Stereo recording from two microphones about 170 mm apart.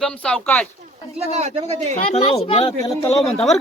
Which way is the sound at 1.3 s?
40° right (ahead or behind).